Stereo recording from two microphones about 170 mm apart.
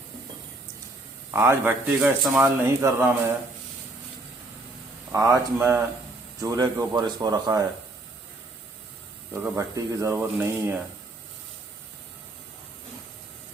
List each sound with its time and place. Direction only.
1.3 s speech: 15° right (ahead or behind)
5.1 s speech: 15° right (ahead or behind)
9.3 s speech: 15° right (ahead or behind)